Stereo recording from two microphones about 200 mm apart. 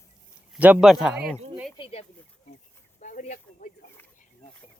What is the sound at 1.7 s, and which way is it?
Speech, 25° left (ahead or behind).